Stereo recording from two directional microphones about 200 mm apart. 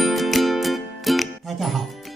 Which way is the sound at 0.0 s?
Centre (ahead or behind).